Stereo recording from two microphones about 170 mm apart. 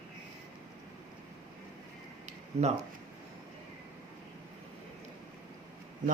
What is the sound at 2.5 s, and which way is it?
Speech, 40° right (ahead or behind).